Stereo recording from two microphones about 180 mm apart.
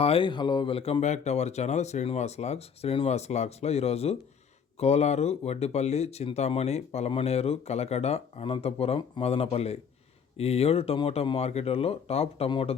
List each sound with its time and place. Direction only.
0.0 s speech: 30° left (ahead or behind)